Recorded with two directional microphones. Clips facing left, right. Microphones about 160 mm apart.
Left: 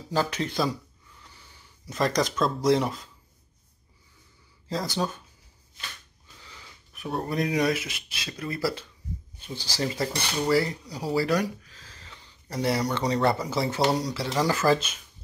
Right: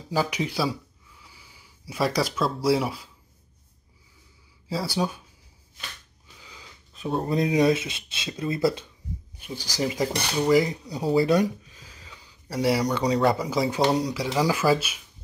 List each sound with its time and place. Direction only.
0.1 s speech: 10° right (ahead or behind)
4.6 s speech: 10° right (ahead or behind)
6.9 s speech: 20° right (ahead or behind)
9.5 s cutlery: 10° right (ahead or behind)
13.8 s speech: 15° right (ahead or behind)